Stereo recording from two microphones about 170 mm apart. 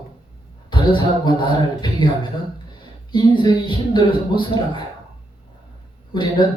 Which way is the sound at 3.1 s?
25° left (ahead or behind).